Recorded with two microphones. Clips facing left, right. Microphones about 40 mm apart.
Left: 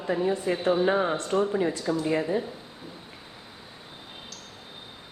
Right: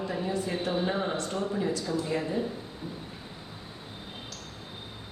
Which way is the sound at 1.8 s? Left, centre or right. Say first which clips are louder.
Left 3 dB; centre.